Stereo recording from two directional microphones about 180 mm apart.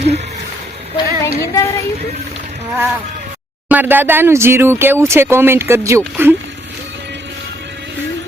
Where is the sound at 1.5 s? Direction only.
15° left (ahead or behind).